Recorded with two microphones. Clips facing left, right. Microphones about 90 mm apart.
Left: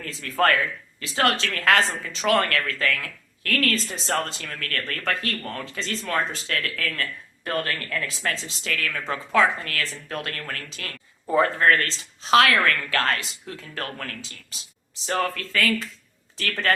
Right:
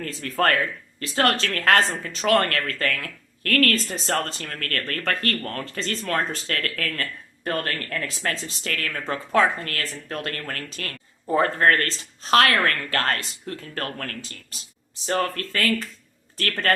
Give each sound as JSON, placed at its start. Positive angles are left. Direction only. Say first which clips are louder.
{"t": 0.0, "sound": "speech", "louder": "even", "side_deg": -45}